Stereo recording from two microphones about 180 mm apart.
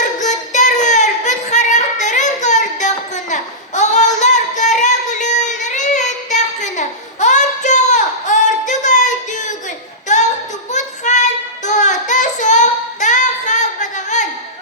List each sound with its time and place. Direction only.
0.0 s child singing: 40° left (ahead or behind)